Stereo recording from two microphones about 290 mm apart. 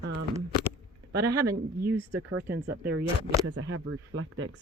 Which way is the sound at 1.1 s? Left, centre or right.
Right.